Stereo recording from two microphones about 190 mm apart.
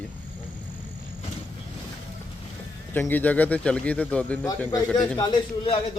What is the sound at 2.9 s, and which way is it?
A man's voice, 10° left (ahead or behind).